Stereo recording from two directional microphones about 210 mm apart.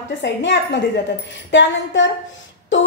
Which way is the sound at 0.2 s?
55° left (ahead or behind).